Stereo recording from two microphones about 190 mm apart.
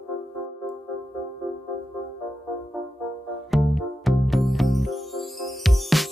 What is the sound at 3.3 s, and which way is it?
Music, centre (ahead or behind).